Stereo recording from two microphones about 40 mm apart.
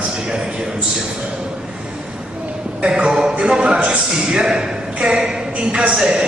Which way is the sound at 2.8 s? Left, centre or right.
Right.